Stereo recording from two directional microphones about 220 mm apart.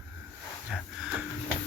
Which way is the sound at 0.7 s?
Centre (ahead or behind).